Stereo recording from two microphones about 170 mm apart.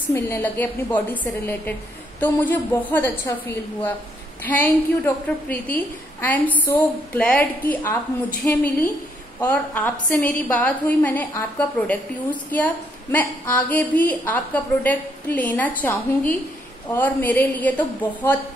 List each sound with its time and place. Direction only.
0.1 s a woman's voice: 15° left (ahead or behind)